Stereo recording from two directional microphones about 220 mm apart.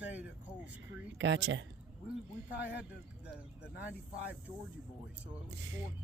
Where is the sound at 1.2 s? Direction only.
55° right (ahead or behind).